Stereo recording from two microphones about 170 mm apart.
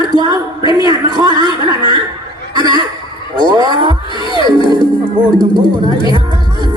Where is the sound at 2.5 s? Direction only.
25° right (ahead or behind).